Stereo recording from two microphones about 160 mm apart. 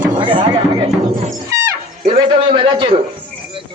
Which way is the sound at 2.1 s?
30° right (ahead or behind).